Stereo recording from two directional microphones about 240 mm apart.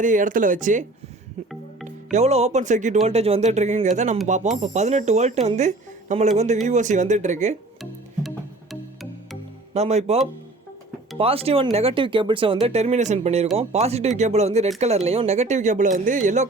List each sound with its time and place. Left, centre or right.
0.0 s speech: right
1.5 s music: centre
2.1 s speech: right
8.7 s music: centre
9.7 s speech: right
11.2 s speech: right